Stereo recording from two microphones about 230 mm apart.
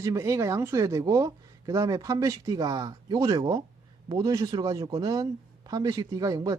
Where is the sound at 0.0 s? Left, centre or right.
Centre.